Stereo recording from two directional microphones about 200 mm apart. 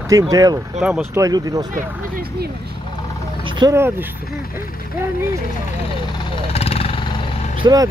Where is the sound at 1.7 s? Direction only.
45° right (ahead or behind).